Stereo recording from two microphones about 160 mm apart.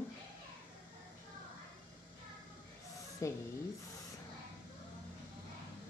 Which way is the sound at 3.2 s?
20° left (ahead or behind).